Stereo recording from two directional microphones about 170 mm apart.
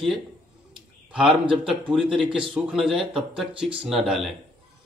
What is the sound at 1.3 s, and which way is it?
Speech, 30° right (ahead or behind).